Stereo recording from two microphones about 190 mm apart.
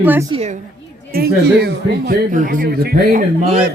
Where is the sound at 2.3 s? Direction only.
45° right (ahead or behind).